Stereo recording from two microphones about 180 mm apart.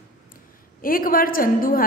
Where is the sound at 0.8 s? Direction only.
50° left (ahead or behind).